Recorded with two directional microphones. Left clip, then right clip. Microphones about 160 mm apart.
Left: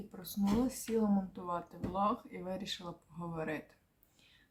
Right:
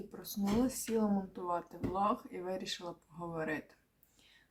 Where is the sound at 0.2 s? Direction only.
Centre (ahead or behind).